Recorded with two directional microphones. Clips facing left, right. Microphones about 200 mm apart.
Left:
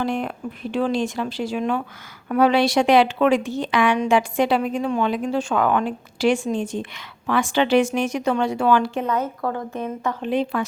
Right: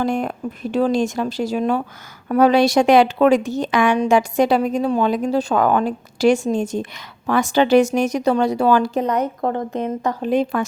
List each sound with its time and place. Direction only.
0.0 s a woman's voice: 45° right (ahead or behind)
9.2 s speech: 25° right (ahead or behind)
10.0 s a woman's voice: 40° right (ahead or behind)